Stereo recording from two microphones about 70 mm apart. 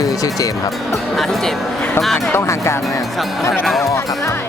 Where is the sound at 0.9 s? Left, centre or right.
Centre.